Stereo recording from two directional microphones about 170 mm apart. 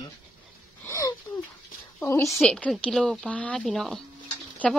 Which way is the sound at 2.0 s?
15° left (ahead or behind).